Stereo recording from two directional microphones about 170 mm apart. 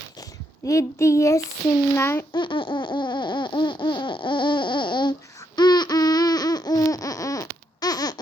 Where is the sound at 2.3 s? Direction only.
30° left (ahead or behind).